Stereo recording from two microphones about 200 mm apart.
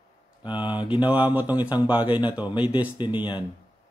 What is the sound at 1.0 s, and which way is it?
Speech, 5° right (ahead or behind).